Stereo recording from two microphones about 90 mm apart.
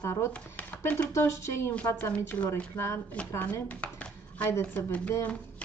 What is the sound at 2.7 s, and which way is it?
Speech, 30° left (ahead or behind).